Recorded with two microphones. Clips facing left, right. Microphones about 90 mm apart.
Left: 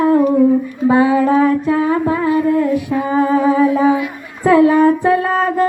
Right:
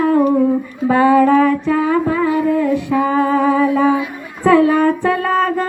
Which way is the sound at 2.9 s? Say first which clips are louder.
Right 2 dB; 25° left (ahead or behind).